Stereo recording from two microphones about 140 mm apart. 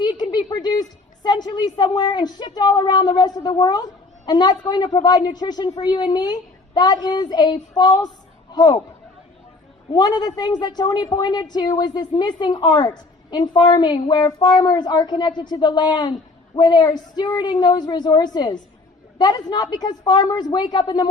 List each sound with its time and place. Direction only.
0.0 s a woman's voice: 30° left (ahead or behind)
9.9 s a woman's voice: 30° left (ahead or behind)